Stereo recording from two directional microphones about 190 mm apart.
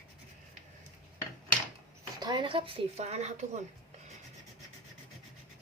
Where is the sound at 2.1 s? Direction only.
25° right (ahead or behind).